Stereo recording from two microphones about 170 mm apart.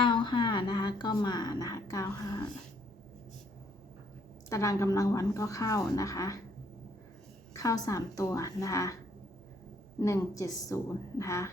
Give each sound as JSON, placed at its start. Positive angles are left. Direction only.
{"t": 0.0, "sound": "speech", "side_deg": 25}
{"t": 4.4, "sound": "a woman's voice", "side_deg": 20}
{"t": 7.5, "sound": "a woman's voice", "side_deg": 20}
{"t": 10.0, "sound": "a woman's voice", "side_deg": 20}